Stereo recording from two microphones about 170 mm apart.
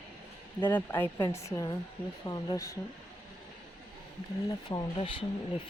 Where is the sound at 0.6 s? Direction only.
10° left (ahead or behind).